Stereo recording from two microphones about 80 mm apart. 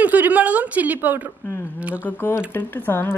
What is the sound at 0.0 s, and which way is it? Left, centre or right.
A woman's voice, right.